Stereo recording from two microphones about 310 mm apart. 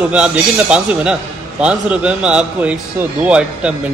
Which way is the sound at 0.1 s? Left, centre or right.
Centre.